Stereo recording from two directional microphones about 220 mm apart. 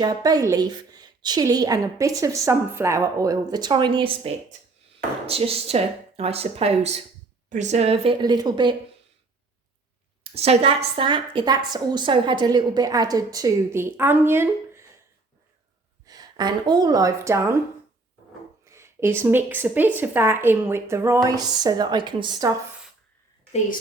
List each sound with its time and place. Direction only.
0.0 s a woman's voice: 20° right (ahead or behind)
10.3 s a woman's voice: 30° right (ahead or behind); by 14.8 s 10° right (ahead or behind)
16.0 s a woman's voice: 20° right (ahead or behind)
18.6 s a woman's voice: 10° right (ahead or behind)